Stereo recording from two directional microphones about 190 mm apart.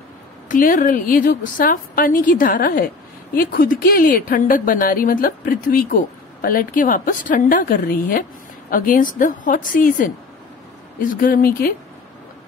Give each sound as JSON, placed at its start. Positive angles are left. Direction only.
{"t": 0.5, "sound": "a woman's voice", "side_deg": 45}